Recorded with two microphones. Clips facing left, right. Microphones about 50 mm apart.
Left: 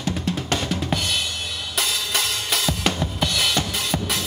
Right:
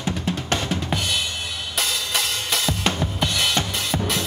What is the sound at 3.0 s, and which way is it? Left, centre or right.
Drum, centre.